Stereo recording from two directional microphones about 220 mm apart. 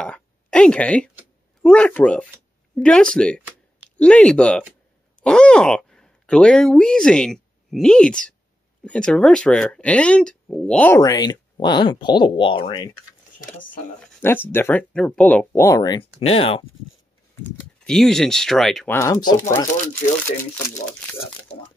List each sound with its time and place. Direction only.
0.0 s a sound: 5° left (ahead or behind)
1.6 s speech: 5° left (ahead or behind); by 12.9 s 20° left (ahead or behind)
13.4 s speech: 40° left (ahead or behind)
14.0 s speech: 10° left (ahead or behind); by 16.6 s 25° left (ahead or behind)
17.8 s speech: centre (ahead or behind)
18.9 s speech: 15° left (ahead or behind)